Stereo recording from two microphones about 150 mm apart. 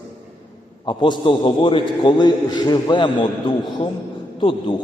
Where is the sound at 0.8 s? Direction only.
30° left (ahead or behind).